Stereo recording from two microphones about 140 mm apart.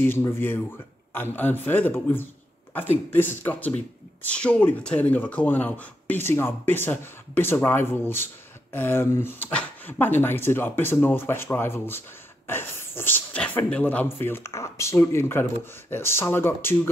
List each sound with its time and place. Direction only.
1.1 s speech: 15° left (ahead or behind)